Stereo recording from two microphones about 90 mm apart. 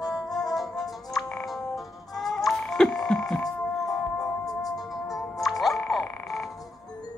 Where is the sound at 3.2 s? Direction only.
5° left (ahead or behind).